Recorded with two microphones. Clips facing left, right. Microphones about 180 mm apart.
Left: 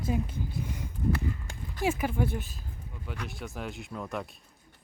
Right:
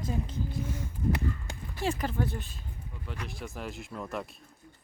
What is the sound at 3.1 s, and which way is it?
Speech, centre (ahead or behind).